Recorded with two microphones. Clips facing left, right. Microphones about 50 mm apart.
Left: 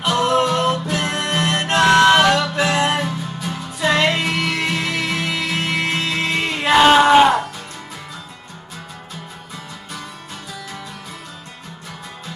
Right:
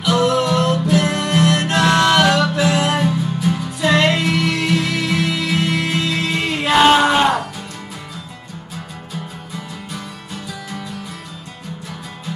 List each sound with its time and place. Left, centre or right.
0.2 s music: left
3.0 s music: centre
6.4 s music: centre